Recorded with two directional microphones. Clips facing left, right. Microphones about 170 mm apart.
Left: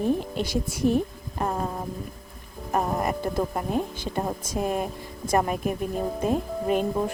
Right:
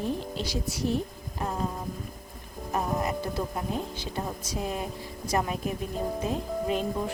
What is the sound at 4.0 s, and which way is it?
A woman's voice, 50° left (ahead or behind).